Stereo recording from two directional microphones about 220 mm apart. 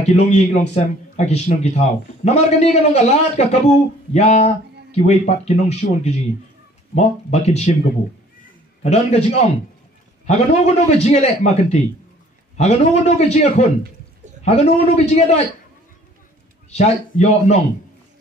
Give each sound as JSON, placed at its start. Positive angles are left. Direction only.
{"t": 0.0, "sound": "a man's voice", "side_deg": 30}
{"t": 8.8, "sound": "a man's voice", "side_deg": 30}
{"t": 16.7, "sound": "a man's voice", "side_deg": 30}